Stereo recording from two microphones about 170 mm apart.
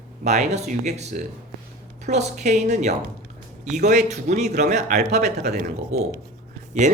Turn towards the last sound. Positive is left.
turn(degrees=-45)  # may be behind; listen again after turning